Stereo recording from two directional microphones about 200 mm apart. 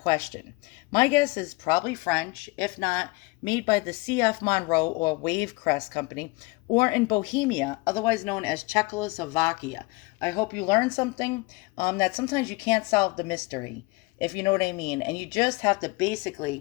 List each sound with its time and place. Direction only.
0.0 s speech: 20° left (ahead or behind)